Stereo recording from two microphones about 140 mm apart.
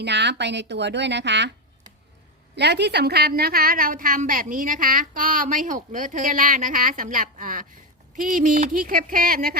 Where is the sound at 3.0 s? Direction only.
90° right.